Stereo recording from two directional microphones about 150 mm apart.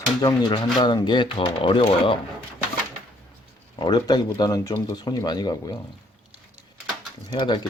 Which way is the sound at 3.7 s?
30° left (ahead or behind).